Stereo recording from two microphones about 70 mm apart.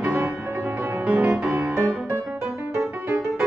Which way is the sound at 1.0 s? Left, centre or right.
Centre.